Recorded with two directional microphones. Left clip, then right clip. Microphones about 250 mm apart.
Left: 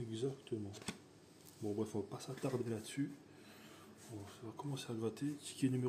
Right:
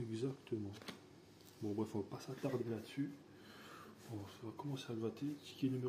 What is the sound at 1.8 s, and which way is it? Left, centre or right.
Speech, centre.